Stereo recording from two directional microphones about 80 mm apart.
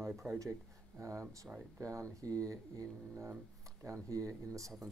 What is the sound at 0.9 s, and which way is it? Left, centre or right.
Speech, right.